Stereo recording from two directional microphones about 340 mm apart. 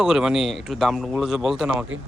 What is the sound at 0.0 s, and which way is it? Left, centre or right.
Speech, centre.